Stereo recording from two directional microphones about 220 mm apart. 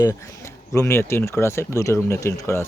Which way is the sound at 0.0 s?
15° left (ahead or behind).